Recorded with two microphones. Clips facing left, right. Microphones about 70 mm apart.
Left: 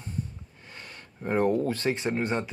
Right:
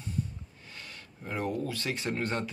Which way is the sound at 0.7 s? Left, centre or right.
Left.